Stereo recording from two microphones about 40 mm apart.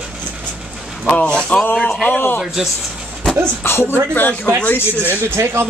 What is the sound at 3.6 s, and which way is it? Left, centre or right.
Speech, left.